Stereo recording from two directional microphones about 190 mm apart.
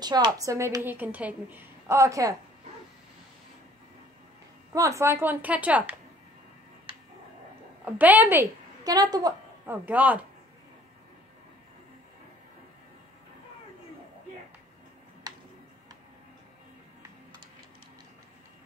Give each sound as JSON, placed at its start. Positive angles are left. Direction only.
{"t": 0.0, "sound": "a woman's voice", "side_deg": -20}
{"t": 4.7, "sound": "a woman's voice", "side_deg": -15}
{"t": 7.8, "sound": "a woman's voice", "side_deg": -10}
{"t": 15.3, "sound": "a sound", "side_deg": -20}